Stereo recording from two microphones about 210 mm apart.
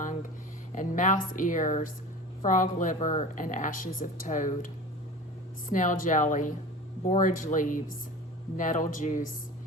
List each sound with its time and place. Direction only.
0.7 s speech: 35° left (ahead or behind)